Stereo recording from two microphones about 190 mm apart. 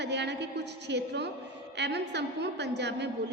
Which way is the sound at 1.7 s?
65° right (ahead or behind).